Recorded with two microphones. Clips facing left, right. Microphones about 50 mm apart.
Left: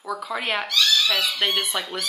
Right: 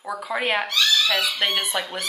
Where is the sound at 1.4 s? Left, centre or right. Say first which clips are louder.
Even; centre.